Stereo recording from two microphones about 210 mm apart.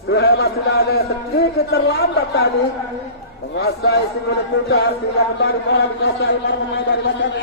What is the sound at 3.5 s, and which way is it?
A man's voice, 50° left (ahead or behind).